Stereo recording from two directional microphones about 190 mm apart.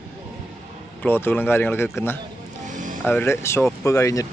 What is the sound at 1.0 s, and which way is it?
Speech, 10° left (ahead or behind).